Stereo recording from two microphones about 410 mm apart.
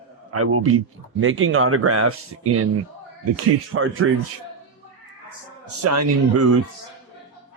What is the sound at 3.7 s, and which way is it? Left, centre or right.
Speech, right.